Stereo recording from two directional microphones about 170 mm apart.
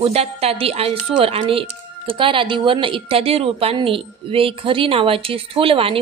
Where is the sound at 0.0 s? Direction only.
35° right (ahead or behind).